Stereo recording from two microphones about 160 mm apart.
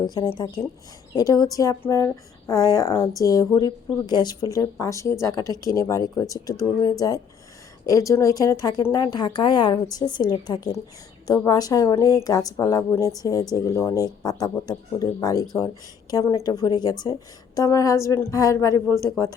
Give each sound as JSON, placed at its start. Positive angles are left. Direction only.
{"t": 0.0, "sound": "speech", "side_deg": 25}